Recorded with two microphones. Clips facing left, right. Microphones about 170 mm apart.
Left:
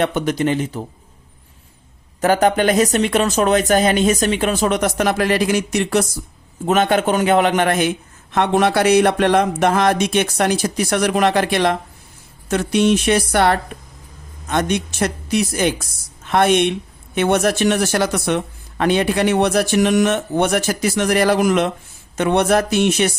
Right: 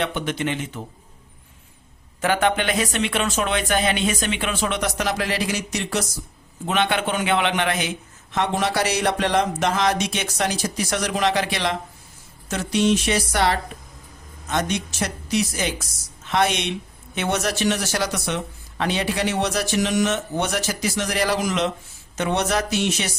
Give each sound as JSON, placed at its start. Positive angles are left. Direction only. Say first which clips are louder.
{"t": 0.0, "sound": "speech", "louder": "left 6 dB", "side_deg": 45}
{"t": 2.2, "sound": "speech", "louder": "left 6 dB", "side_deg": 40}
{"t": 6.7, "sound": "a man's voice", "louder": "left 6 dB", "side_deg": 45}